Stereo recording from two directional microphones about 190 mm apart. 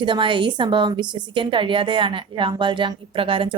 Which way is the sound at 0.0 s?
25° right (ahead or behind).